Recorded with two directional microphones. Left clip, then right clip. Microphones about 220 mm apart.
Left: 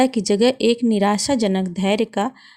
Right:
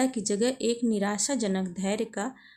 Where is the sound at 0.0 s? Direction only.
35° left (ahead or behind).